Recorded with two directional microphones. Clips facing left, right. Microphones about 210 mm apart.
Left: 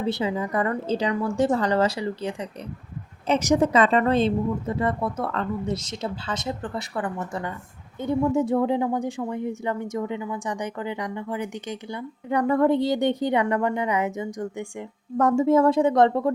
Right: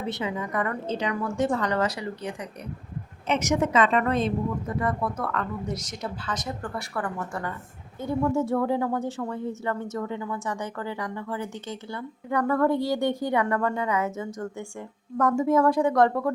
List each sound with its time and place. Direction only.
0.0 s a woman's voice: 30° left (ahead or behind)
15.2 s speech: 25° left (ahead or behind)